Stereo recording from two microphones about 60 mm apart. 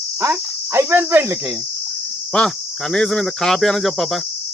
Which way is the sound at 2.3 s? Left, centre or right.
Centre.